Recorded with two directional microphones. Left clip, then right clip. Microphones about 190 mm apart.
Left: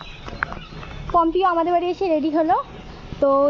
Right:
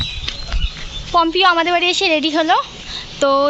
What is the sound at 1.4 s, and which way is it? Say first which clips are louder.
A woman's voice: right 5 dB; 20° right (ahead or behind).